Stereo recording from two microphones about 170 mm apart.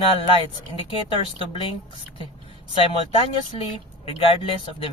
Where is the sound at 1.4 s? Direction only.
30° left (ahead or behind).